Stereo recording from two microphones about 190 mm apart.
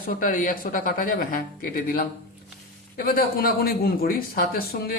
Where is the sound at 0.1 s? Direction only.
45° left (ahead or behind).